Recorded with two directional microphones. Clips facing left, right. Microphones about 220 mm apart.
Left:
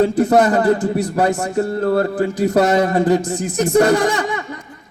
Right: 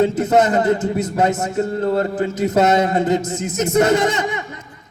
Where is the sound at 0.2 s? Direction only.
20° right (ahead or behind).